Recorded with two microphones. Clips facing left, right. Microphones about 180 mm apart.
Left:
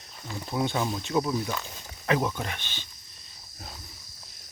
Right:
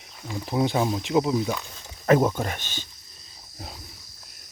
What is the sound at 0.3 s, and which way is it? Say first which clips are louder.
Speech: right 4 dB; 20° right (ahead or behind).